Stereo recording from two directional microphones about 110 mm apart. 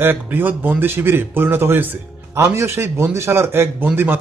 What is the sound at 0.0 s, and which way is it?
Speech, 20° right (ahead or behind).